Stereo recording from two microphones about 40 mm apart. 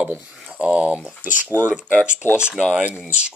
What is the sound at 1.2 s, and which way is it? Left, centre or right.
Speech, right.